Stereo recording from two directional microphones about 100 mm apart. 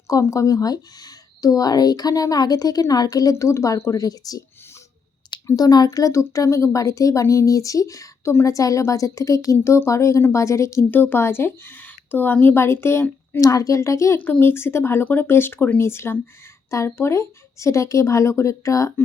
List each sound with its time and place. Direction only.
0.1 s speech: 30° left (ahead or behind)
5.5 s speech: 40° left (ahead or behind)
10.9 s a woman's voice: 20° left (ahead or behind)
14.2 s a woman's voice: 15° left (ahead or behind); by 19.0 s 35° left (ahead or behind)